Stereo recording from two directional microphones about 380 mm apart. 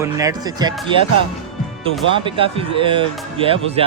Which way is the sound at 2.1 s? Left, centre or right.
Centre.